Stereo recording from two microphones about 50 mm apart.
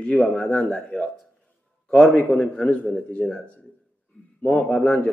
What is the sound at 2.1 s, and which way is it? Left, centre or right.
Speech, centre.